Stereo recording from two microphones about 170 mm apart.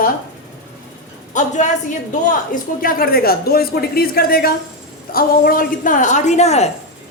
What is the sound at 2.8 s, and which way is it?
A woman's voice, 60° left (ahead or behind).